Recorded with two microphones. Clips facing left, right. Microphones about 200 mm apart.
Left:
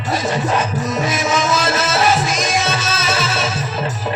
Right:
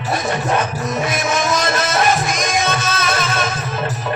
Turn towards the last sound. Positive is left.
turn(degrees=-55)  # may be behind; listen again after turning